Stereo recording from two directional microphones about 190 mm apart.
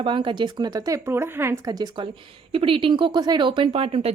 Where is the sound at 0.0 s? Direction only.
25° right (ahead or behind).